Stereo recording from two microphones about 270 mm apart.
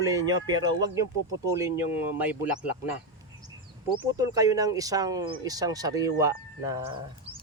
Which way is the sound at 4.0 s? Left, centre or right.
Centre.